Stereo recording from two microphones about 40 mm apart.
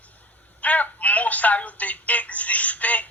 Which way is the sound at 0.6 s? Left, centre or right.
Left.